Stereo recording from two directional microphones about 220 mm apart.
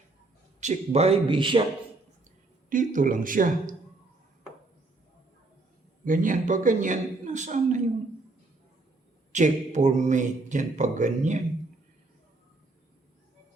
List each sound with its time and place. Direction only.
0.6 s a man's voice: 30° right (ahead or behind)
2.6 s a man's voice: 35° right (ahead or behind)
6.1 s a man's voice: 35° right (ahead or behind)
9.3 s a man's voice: 35° right (ahead or behind)